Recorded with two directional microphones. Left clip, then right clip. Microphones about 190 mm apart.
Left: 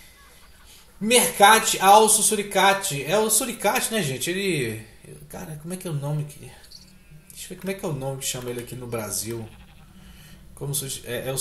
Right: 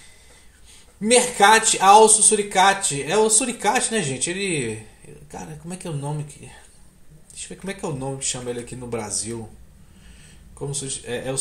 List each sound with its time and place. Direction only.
1.0 s a man's voice: 15° right (ahead or behind)
10.7 s a man's voice: 10° right (ahead or behind)